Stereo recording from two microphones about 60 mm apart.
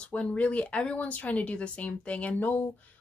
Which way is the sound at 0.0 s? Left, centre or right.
Centre.